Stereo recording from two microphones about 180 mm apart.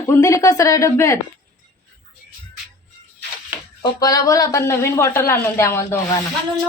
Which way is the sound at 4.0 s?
20° left (ahead or behind).